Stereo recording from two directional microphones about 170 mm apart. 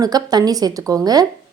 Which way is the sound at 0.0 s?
25° right (ahead or behind).